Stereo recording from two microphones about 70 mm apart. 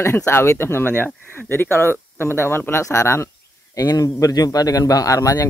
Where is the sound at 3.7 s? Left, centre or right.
Left.